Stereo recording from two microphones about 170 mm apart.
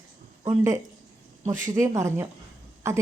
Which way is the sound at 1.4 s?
20° right (ahead or behind).